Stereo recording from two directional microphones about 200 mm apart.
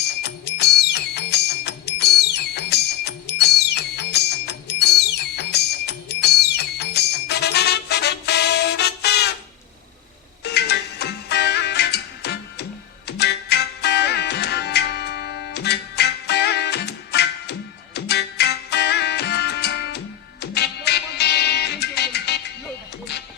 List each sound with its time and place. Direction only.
0.2 s music: 55° left (ahead or behind)
10.4 s music: 55° left (ahead or behind)